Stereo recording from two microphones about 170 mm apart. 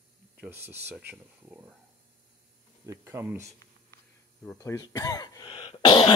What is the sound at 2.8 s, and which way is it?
Speech, 15° right (ahead or behind).